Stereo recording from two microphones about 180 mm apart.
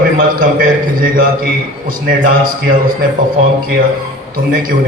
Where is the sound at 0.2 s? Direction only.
55° right (ahead or behind).